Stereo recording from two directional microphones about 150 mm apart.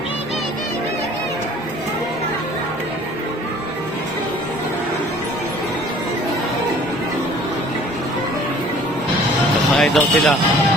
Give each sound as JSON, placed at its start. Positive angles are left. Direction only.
{"t": 9.7, "sound": "speech", "side_deg": 0}